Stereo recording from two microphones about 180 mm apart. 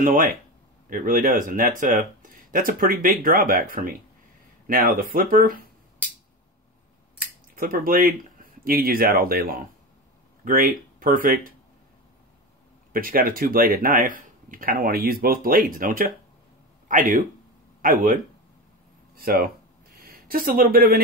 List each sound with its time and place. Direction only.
0.0 s speech: 50° right (ahead or behind)
7.5 s speech: 50° right (ahead or behind)
12.9 s speech: 55° right (ahead or behind)